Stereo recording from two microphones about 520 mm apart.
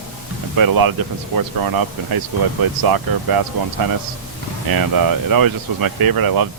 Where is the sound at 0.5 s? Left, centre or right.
Right.